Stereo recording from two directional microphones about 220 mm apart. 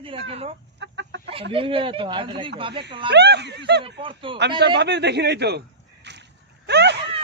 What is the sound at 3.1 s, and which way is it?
Speech, 50° right (ahead or behind).